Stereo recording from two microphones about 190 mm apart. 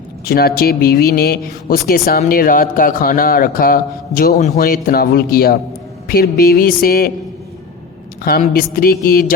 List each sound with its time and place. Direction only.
0.3 s speech: 55° left (ahead or behind); by 4.5 s 40° left (ahead or behind)
4.5 s speech: 50° left (ahead or behind)
8.2 s speech: 50° left (ahead or behind)